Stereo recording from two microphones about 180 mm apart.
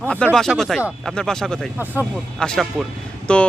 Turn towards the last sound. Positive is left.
turn(degrees=5)  # may be behind; listen again after turning